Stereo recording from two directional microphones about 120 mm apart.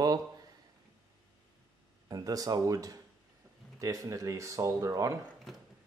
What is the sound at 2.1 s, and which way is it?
Speech, 30° right (ahead or behind).